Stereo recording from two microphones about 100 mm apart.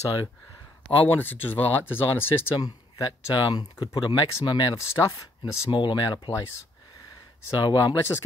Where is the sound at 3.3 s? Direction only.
45° left (ahead or behind).